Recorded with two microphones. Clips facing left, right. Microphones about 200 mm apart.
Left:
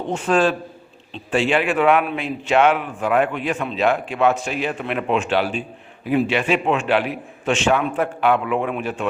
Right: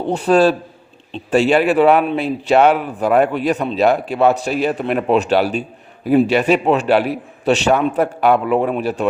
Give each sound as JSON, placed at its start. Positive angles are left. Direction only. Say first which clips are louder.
{"t": 0.0, "sound": "a man's voice", "louder": "right 5 dB", "side_deg": -35}